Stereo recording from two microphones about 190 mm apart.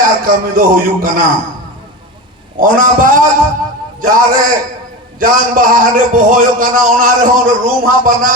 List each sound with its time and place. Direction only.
0.0 s a man's voice: 45° right (ahead or behind)
2.6 s a man's voice: 45° right (ahead or behind)